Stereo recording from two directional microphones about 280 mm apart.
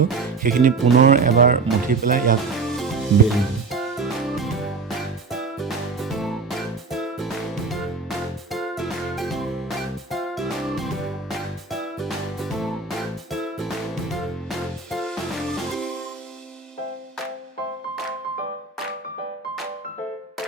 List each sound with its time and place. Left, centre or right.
0.4 s speech: right
2.7 s music: centre
8.5 s music: centre